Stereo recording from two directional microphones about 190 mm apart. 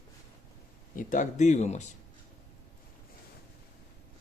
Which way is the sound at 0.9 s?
40° left (ahead or behind).